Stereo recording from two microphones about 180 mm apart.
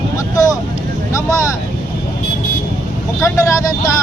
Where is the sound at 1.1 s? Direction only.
20° left (ahead or behind).